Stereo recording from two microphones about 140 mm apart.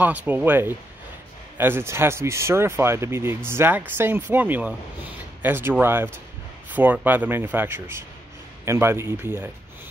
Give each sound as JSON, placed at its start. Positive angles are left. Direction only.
{"t": 0.0, "sound": "speech", "side_deg": -10}